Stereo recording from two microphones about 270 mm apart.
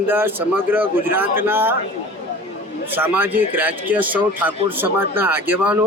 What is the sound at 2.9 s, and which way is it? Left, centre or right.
A man's voice, centre.